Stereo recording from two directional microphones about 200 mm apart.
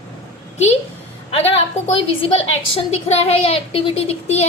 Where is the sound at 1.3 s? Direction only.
30° left (ahead or behind).